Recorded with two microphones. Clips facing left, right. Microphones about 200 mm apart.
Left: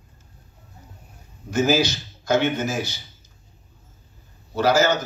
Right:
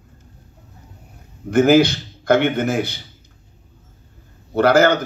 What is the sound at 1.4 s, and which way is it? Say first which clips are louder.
A man's voice: right 7 dB; 60° right (ahead or behind).